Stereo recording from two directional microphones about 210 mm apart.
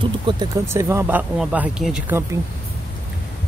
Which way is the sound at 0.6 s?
10° right (ahead or behind).